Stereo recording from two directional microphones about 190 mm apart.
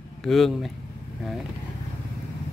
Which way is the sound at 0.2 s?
Centre (ahead or behind).